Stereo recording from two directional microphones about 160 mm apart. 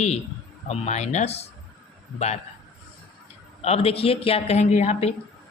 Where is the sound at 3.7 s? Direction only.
40° left (ahead or behind).